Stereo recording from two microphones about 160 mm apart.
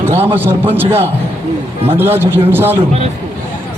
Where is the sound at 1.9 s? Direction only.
15° right (ahead or behind).